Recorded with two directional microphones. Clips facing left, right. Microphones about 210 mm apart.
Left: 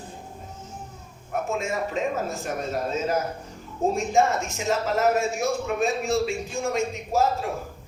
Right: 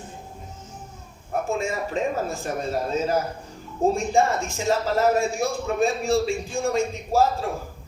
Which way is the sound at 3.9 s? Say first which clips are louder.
Left 3 dB; 30° right (ahead or behind).